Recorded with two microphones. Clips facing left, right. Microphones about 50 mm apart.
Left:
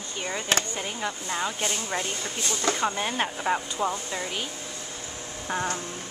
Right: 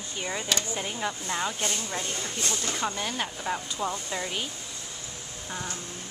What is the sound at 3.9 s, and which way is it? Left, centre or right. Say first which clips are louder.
Speech: left 1 dB; centre.